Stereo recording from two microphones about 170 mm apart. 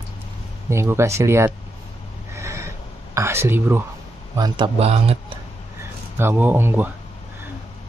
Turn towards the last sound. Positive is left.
turn(degrees=-10)  # may be behind; listen again after turning